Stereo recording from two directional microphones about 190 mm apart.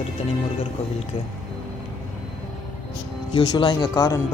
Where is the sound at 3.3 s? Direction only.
25° left (ahead or behind).